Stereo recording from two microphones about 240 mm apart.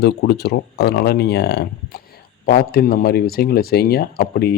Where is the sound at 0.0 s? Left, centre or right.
Left.